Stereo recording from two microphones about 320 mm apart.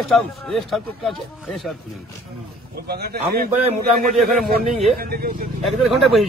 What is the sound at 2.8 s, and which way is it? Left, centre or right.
Speech, right.